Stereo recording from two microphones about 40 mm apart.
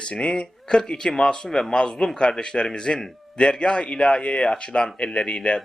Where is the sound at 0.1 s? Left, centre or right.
Left.